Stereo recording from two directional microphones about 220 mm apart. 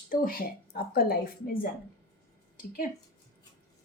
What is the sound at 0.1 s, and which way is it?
A woman's voice, 40° left (ahead or behind).